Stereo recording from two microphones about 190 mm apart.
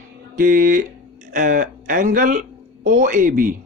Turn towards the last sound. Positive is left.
turn(degrees=-45)  # may be behind; listen again after turning